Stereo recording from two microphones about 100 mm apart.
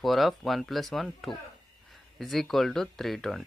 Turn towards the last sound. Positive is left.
turn(degrees=0)  # may be behind; listen again after turning